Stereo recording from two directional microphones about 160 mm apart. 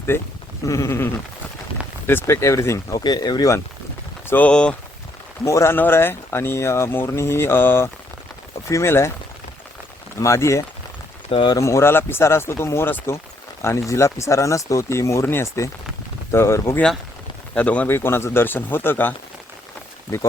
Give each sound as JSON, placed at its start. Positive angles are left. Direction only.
{"t": 0.1, "sound": "speech", "side_deg": 15}
{"t": 4.3, "sound": "speech", "side_deg": 10}
{"t": 10.2, "sound": "speech", "side_deg": 20}
{"t": 11.3, "sound": "speech", "side_deg": 35}
{"t": 11.5, "sound": "speech", "side_deg": 20}